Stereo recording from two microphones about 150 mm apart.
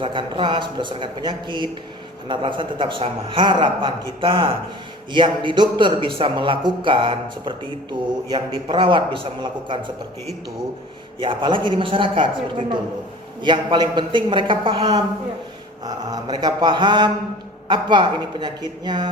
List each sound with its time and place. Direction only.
0.0 s a man's voice: 35° right (ahead or behind)
11.2 s a man's voice: 30° right (ahead or behind)
15.8 s a sound: 25° right (ahead or behind)
17.7 s a man's voice: 30° right (ahead or behind)